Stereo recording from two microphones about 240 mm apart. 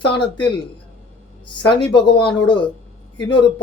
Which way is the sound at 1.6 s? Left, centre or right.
Centre.